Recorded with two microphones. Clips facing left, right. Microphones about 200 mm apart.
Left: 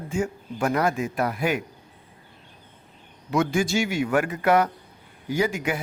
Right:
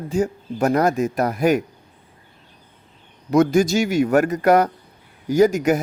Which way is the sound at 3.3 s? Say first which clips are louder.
Right 7 dB; 40° right (ahead or behind).